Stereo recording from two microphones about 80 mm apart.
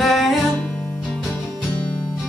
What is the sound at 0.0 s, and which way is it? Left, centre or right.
Music, centre.